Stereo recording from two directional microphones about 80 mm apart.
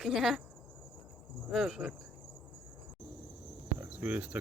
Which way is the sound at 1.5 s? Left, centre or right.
Centre.